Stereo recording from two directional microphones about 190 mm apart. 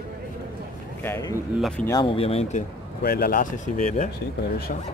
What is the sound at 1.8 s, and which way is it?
Speech, 25° left (ahead or behind).